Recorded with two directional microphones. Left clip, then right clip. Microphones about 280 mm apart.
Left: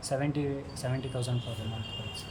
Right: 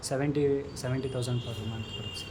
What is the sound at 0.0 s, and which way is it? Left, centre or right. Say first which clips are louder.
A man's voice: right 3 dB; centre.